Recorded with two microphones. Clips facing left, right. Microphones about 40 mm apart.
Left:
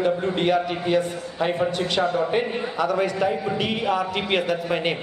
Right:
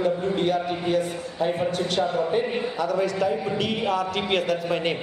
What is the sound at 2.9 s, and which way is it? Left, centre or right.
A man's voice, left.